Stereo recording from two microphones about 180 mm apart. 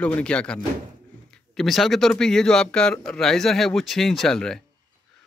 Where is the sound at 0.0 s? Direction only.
5° left (ahead or behind).